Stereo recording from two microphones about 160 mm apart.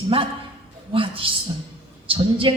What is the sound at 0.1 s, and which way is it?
A woman's voice, 35° right (ahead or behind).